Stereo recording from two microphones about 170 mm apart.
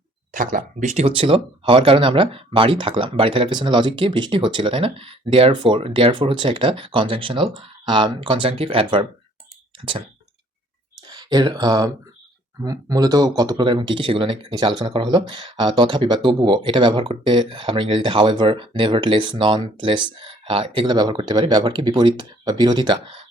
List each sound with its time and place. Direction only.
0.3 s speech: 50° right (ahead or behind); by 9.0 s 30° right (ahead or behind)
11.1 s speech: 25° right (ahead or behind)